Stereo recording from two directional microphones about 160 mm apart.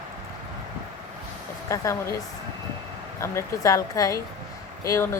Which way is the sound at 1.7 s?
20° left (ahead or behind).